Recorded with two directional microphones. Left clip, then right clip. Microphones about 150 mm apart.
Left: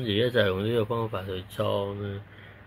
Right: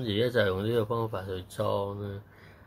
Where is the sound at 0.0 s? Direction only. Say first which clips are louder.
Left 2 dB; 5° left (ahead or behind).